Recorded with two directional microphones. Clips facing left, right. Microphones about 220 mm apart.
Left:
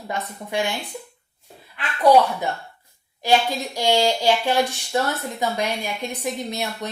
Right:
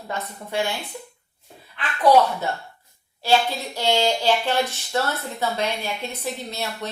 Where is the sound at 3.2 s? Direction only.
15° left (ahead or behind).